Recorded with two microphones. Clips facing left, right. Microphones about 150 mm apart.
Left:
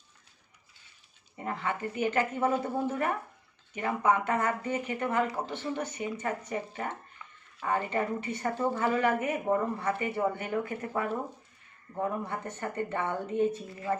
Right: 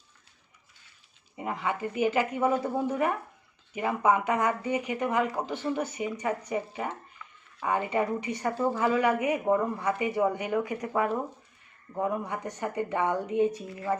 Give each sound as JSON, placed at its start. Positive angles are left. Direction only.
{"t": 1.4, "sound": "a woman's voice", "side_deg": -10}
{"t": 7.2, "sound": "a sound", "side_deg": 20}
{"t": 7.6, "sound": "a woman's voice", "side_deg": -10}